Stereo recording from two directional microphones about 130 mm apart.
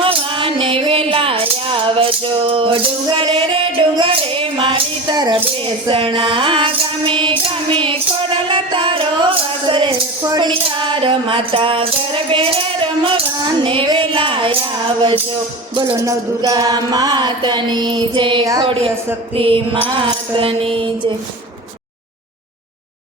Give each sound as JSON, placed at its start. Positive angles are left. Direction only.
{"t": 0.0, "sound": "music", "side_deg": -45}
{"t": 15.7, "sound": "music", "side_deg": -40}
{"t": 16.0, "sound": "music", "side_deg": -30}